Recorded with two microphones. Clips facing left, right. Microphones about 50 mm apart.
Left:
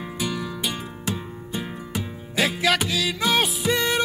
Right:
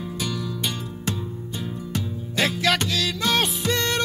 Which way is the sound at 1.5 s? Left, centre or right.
Centre.